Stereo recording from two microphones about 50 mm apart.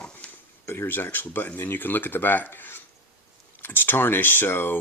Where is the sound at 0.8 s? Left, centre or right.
Left.